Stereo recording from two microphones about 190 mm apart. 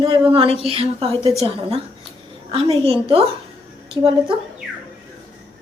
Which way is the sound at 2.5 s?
30° right (ahead or behind).